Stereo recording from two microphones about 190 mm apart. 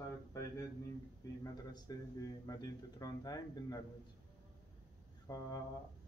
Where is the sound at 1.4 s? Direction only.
20° left (ahead or behind).